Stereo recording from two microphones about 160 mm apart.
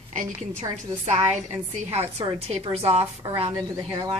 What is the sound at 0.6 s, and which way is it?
Speech, 25° right (ahead or behind).